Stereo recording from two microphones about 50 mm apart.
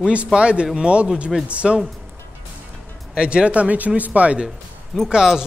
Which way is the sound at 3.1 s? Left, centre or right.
Centre.